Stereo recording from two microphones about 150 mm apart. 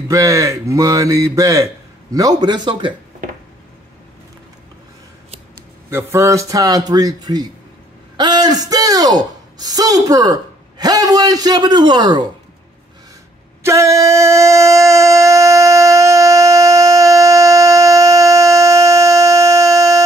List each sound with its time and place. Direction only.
0.1 s a man's voice: 20° right (ahead or behind)
5.9 s a man's voice: 20° right (ahead or behind)
13.6 s a sound: 20° right (ahead or behind)